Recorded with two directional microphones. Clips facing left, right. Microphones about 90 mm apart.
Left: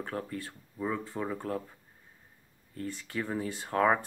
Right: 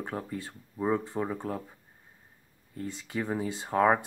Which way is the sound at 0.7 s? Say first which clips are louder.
Right 5 dB; 25° right (ahead or behind).